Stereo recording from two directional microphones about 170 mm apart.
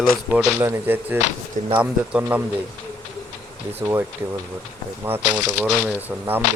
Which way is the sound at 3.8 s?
15° right (ahead or behind).